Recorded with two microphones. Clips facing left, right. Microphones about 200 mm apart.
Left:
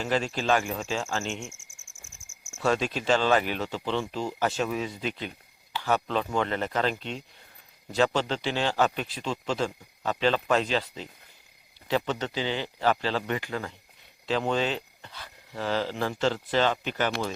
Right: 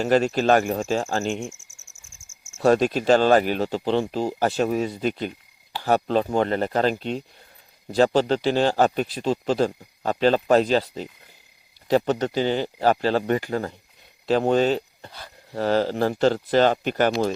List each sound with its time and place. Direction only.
0.0 s speech: 45° right (ahead or behind)
2.6 s speech: 45° right (ahead or behind)